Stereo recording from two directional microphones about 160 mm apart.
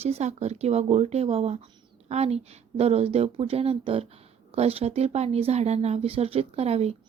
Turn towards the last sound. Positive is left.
turn(degrees=-40)  # may be behind; listen again after turning